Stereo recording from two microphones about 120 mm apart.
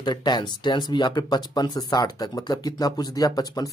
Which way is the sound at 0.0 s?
35° left (ahead or behind).